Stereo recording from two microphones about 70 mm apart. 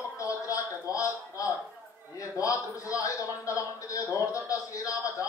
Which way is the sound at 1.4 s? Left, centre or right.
Left.